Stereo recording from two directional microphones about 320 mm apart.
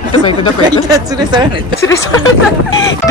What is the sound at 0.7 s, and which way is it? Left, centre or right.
Speech, centre.